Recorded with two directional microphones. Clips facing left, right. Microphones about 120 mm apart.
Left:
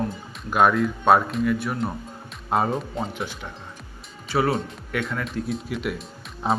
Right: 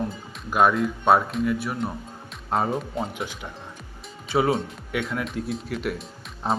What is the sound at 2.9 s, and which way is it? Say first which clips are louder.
Speech: even; 10° right (ahead or behind).